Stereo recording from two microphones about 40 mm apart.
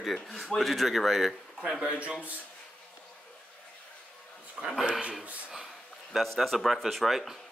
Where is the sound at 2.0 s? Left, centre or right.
Right.